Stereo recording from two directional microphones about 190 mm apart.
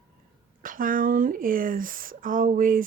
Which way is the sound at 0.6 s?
45° right (ahead or behind).